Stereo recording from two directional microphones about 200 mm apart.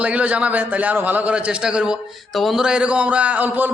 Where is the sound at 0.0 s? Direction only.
5° right (ahead or behind).